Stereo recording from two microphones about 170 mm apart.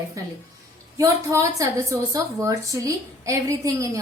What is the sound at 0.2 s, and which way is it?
A woman's voice, 20° right (ahead or behind).